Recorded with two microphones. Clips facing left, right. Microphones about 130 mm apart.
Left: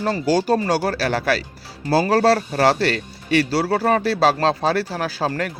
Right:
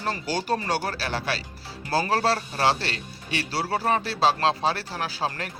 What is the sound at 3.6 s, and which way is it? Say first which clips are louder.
Speech: left 8 dB; 65° left (ahead or behind).